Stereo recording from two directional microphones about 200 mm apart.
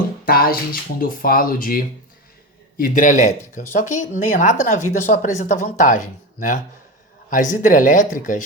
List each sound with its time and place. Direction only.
0.3 s speech: 50° left (ahead or behind)